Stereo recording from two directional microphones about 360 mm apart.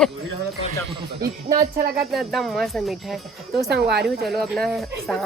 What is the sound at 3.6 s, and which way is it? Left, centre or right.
Speech, right.